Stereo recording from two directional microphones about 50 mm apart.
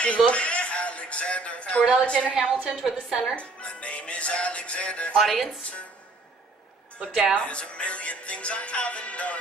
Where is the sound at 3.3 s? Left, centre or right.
Left.